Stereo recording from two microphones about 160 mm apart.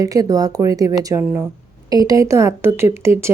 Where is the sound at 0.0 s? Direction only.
20° right (ahead or behind).